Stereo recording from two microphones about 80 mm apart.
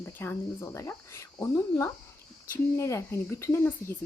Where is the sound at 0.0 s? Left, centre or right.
Left.